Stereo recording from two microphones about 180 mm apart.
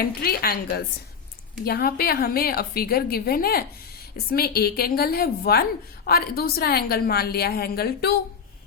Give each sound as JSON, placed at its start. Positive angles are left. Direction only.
{"t": 0.0, "sound": "a woman's voice", "side_deg": 55}